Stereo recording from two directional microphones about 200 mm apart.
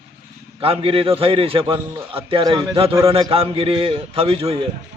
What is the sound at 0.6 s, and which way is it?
A man's voice, 30° right (ahead or behind).